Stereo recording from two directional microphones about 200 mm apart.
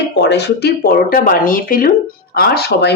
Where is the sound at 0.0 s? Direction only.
60° left (ahead or behind).